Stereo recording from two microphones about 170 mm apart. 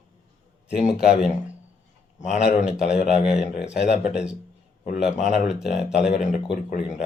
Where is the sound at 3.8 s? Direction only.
5° right (ahead or behind).